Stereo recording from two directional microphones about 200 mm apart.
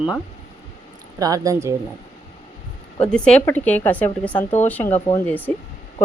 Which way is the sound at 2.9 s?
5° left (ahead or behind).